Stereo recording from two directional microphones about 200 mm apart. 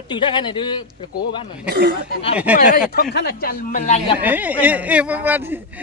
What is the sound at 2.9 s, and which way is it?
Speech, 50° left (ahead or behind).